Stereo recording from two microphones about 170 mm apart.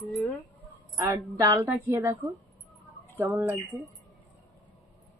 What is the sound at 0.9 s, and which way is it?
A woman's voice, 15° right (ahead or behind).